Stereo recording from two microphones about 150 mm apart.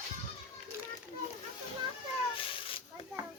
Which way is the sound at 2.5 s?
35° left (ahead or behind).